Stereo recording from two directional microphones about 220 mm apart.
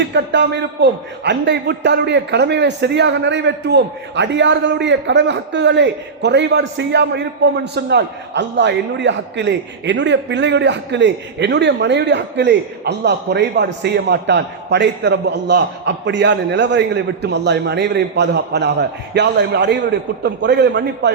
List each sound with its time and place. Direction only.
0.0 s a man's voice: 50° right (ahead or behind)